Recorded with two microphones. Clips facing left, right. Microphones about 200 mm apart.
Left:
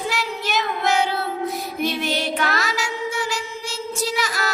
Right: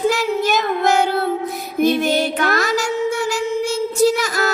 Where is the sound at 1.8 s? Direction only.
45° right (ahead or behind).